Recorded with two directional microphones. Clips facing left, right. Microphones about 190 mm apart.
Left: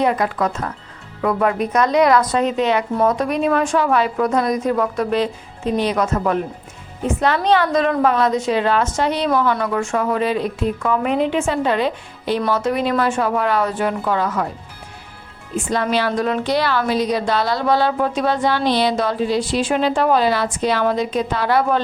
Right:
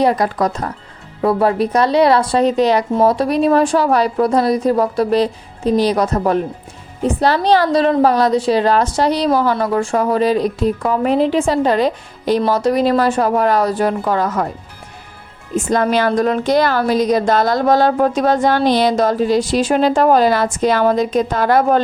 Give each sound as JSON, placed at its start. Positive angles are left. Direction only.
{"t": 0.0, "sound": "a woman's voice", "side_deg": -35}
{"t": 15.5, "sound": "a woman's voice", "side_deg": -45}